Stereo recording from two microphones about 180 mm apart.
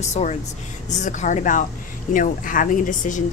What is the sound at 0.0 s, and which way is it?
A woman's voice, 40° left (ahead or behind).